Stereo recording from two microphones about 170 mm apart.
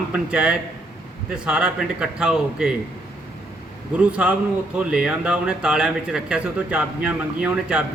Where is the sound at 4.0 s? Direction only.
5° right (ahead or behind).